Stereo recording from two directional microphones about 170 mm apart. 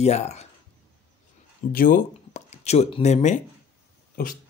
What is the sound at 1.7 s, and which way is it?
Speech, 50° left (ahead or behind).